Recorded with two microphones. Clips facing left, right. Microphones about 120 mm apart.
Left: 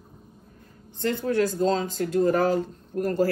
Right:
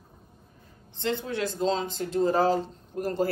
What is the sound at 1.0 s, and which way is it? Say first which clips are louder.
Speech: left 5 dB; 20° right (ahead or behind).